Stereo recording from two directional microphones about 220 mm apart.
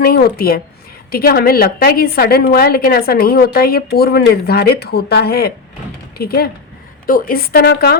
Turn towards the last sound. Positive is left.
turn(degrees=45)  # may be behind; listen again after turning